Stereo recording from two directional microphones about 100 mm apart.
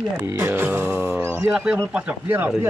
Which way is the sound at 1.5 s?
10° right (ahead or behind).